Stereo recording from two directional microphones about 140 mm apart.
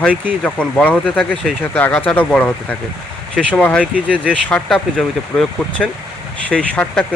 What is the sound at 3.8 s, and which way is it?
Speech, 10° right (ahead or behind).